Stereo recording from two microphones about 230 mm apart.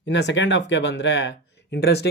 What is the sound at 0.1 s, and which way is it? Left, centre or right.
Speech, left.